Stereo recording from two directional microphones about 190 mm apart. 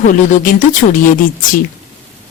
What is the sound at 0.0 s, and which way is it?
Speech, 45° left (ahead or behind).